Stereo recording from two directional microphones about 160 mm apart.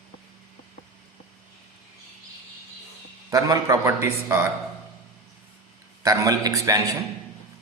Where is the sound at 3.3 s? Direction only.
25° right (ahead or behind).